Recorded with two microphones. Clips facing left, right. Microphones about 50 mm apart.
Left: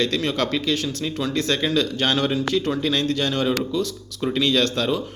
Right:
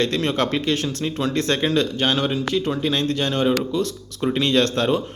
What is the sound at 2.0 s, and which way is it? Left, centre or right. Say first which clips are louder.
A man's voice: even; centre.